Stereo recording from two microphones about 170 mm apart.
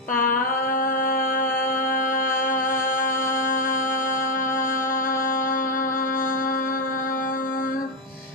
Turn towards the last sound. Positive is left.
turn(degrees=55)  # may be behind; listen again after turning